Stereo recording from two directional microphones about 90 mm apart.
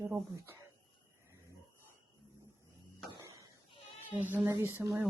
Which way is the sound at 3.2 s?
40° right (ahead or behind).